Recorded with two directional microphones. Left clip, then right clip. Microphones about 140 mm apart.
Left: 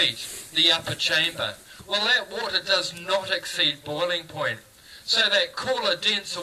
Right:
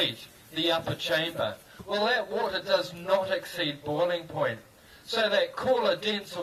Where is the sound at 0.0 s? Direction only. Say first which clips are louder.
Left 6 dB; 45° right (ahead or behind).